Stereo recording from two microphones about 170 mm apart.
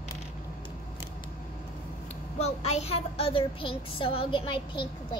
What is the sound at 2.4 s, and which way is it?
Speech, 40° left (ahead or behind).